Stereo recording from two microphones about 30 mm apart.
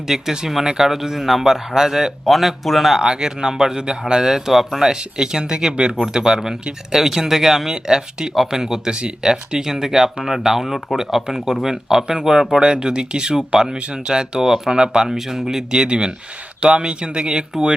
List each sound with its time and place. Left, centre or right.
0.1 s a man's voice: centre
2.2 s speech: centre
3.0 s a man's voice: right
6.0 s a man's voice: centre
12.6 s speech: right
14.4 s a man's voice: centre
15.9 s speech: right